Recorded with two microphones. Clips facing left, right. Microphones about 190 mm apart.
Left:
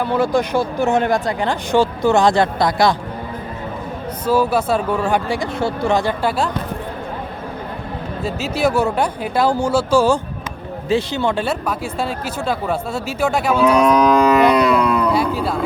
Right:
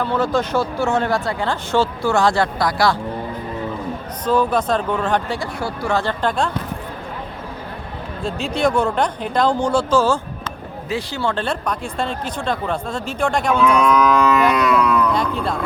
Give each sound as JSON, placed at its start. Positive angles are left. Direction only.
{"t": 0.0, "sound": "speech", "side_deg": 10}
{"t": 4.3, "sound": "speech", "side_deg": 5}
{"t": 5.5, "sound": "speech", "side_deg": 25}
{"t": 6.0, "sound": "speech", "side_deg": 10}
{"t": 8.2, "sound": "speech", "side_deg": 5}
{"t": 10.8, "sound": "speech", "side_deg": 25}
{"t": 13.6, "sound": "cattle", "side_deg": 35}
{"t": 15.1, "sound": "a sound", "side_deg": 5}